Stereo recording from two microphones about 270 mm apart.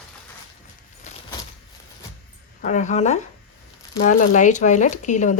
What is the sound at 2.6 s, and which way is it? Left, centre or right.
A woman's voice, left.